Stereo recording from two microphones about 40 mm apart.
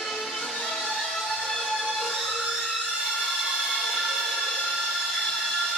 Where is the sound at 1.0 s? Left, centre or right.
Centre.